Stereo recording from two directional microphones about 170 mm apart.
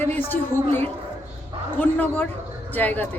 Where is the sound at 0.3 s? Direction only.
10° left (ahead or behind).